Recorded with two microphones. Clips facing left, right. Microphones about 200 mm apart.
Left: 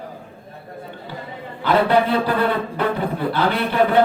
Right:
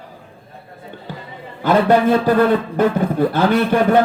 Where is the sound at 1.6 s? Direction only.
45° right (ahead or behind).